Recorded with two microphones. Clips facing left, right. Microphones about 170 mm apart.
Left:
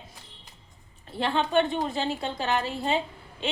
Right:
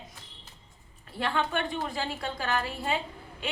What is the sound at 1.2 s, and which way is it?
A woman's voice, 25° left (ahead or behind).